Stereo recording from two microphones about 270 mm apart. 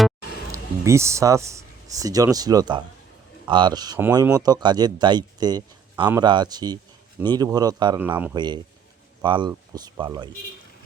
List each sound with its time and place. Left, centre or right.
0.5 s speech: centre